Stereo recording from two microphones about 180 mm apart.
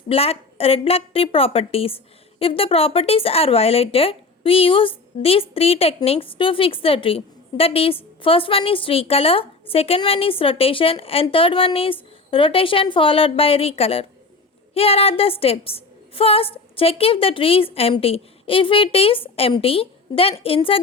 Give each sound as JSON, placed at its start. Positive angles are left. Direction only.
{"t": 0.1, "sound": "speech", "side_deg": 35}